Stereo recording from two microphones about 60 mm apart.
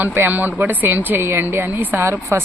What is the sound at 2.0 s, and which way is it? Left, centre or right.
Speech, right.